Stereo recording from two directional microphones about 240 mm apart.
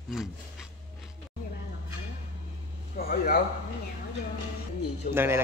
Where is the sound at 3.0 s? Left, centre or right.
Left.